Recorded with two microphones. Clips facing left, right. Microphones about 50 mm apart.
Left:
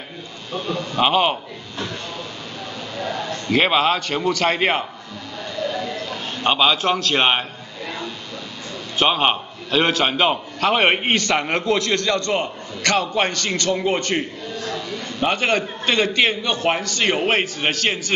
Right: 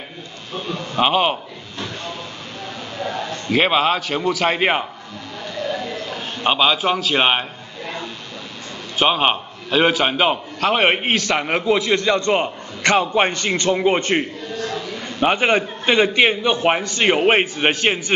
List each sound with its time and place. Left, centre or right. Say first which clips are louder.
0.7 s a man's voice: even; centre
3.4 s a man's voice: even; centre
5.7 s a sound: right 1 dB; centre
8.9 s a man's voice: right 1 dB; centre; by 14.2 s right
14.7 s a sound: even; centre
15.8 s a man's voice: right 4 dB; centre